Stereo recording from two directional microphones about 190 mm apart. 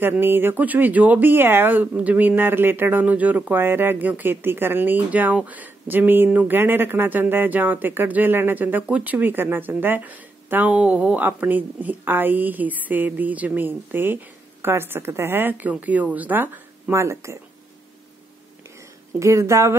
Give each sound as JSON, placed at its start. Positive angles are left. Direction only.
{"t": 0.0, "sound": "speech", "side_deg": -10}
{"t": 19.1, "sound": "speech", "side_deg": -15}